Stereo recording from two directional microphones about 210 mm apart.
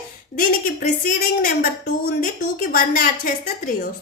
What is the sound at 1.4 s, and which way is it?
A woman's voice, 40° left (ahead or behind).